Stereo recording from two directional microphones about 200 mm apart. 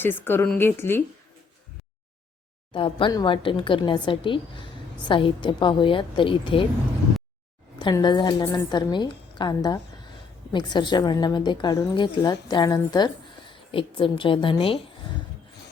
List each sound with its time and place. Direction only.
0.0 s a woman's voice: 10° left (ahead or behind)
2.7 s a woman's voice: 25° left (ahead or behind)
7.8 s a woman's voice: 20° left (ahead or behind)